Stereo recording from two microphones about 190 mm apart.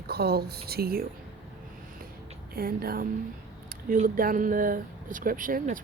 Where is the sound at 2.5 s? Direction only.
50° right (ahead or behind).